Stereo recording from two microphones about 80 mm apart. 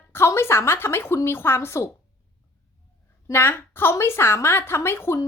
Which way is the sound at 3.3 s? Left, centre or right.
Left.